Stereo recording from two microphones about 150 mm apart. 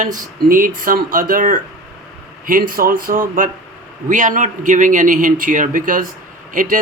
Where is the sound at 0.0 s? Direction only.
65° right (ahead or behind).